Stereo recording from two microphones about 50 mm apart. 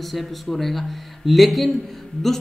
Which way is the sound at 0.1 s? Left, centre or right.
Centre.